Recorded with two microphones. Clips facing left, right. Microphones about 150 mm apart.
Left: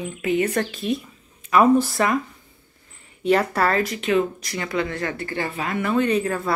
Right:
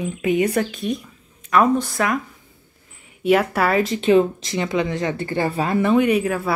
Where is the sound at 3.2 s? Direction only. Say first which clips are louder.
Right 2 dB; 5° right (ahead or behind).